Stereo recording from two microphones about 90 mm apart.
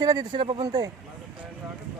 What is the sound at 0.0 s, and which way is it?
Speech, 45° right (ahead or behind).